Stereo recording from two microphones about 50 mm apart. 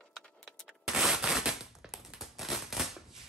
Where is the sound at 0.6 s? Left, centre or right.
Centre.